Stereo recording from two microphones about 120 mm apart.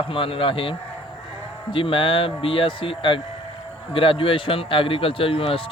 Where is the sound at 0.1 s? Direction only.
50° left (ahead or behind).